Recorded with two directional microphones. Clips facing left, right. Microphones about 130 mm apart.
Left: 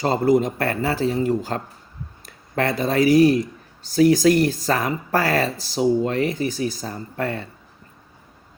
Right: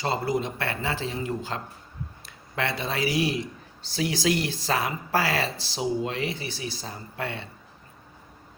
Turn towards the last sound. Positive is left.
turn(degrees=45)  # may be behind; listen again after turning